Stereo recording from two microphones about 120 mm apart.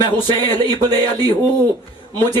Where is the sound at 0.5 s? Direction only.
35° right (ahead or behind).